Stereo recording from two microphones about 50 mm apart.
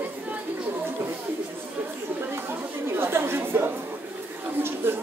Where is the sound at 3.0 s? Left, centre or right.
Right.